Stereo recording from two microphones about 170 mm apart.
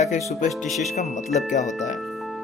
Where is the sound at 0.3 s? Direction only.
45° left (ahead or behind).